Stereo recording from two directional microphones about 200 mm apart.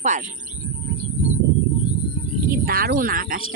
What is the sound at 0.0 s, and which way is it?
Speech, 35° right (ahead or behind).